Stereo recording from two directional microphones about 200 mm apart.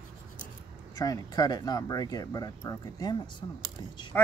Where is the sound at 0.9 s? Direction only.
20° left (ahead or behind).